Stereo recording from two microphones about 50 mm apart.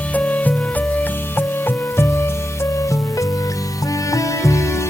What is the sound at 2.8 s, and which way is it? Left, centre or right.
Music, left.